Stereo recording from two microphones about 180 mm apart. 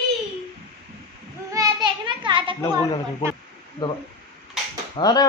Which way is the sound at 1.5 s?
25° right (ahead or behind).